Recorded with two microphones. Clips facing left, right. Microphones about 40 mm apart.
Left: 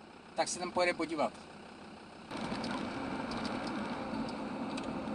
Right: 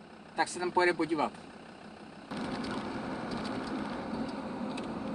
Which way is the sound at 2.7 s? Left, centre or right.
Centre.